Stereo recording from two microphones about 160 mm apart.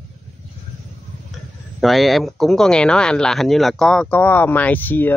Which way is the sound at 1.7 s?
Centre (ahead or behind).